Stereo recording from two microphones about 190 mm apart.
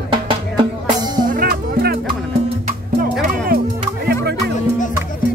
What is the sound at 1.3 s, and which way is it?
Music, 50° right (ahead or behind).